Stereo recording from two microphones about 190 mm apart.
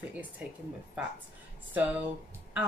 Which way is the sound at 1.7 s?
10° right (ahead or behind).